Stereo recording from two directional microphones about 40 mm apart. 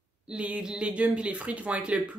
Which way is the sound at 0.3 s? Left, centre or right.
Right.